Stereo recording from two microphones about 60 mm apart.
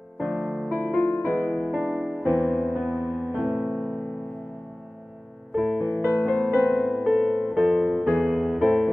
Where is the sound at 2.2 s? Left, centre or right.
Left.